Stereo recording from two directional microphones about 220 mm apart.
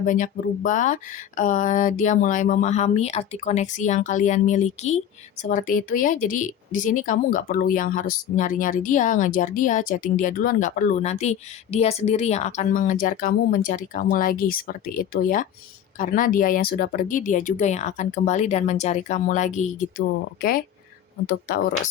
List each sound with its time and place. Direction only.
0.0 s speech: 35° left (ahead or behind)